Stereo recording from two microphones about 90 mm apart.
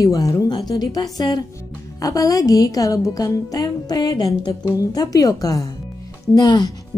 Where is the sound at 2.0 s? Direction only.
40° left (ahead or behind).